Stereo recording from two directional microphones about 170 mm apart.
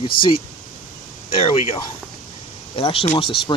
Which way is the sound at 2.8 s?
35° left (ahead or behind).